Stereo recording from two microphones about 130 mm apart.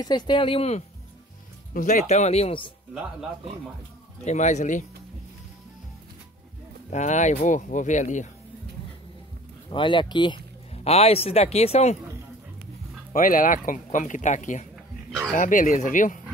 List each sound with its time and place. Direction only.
0.0 s speech: 35° left (ahead or behind); by 0.8 s 50° left (ahead or behind)
1.7 s speech: 85° left; by 2.7 s 45° left (ahead or behind)
4.2 s speech: 65° left (ahead or behind)
6.9 s speech: 65° left (ahead or behind)
9.7 s speech: 40° left (ahead or behind)
10.7 s speech: 50° left (ahead or behind)
13.1 s speech: 90° left; by 14.7 s 70° left (ahead or behind)
15.3 s speech: 85° left